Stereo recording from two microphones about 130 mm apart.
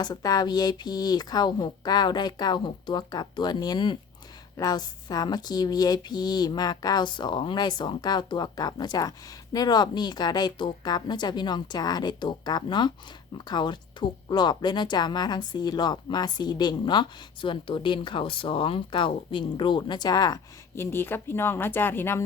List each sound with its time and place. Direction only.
0.0 s speech: 30° left (ahead or behind)